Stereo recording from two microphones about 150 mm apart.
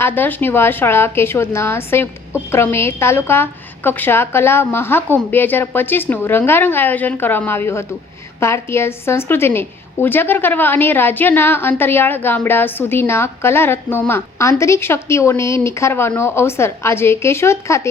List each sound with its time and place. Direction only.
0.0 s a woman's voice: 10° left (ahead or behind)